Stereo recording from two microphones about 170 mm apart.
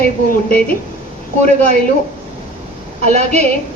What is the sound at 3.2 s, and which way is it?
Speech, 40° right (ahead or behind).